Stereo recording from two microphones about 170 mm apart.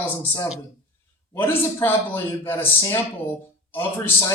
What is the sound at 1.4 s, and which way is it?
A man's voice, 15° left (ahead or behind).